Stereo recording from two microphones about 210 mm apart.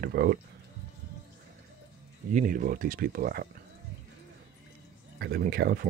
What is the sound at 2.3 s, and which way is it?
Speech, 40° right (ahead or behind).